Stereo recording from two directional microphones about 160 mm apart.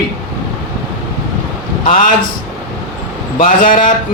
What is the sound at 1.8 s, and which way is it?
Speech, 50° left (ahead or behind).